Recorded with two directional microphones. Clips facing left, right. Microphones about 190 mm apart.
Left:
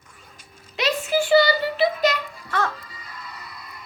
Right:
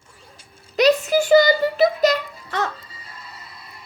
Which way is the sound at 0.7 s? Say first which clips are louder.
Right 6 dB; 40° right (ahead or behind).